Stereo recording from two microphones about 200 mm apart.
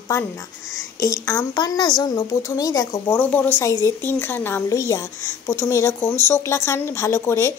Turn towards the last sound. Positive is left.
turn(degrees=15)  # may be behind; listen again after turning